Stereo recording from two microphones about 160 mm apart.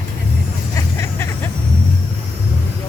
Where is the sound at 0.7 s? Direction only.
15° left (ahead or behind).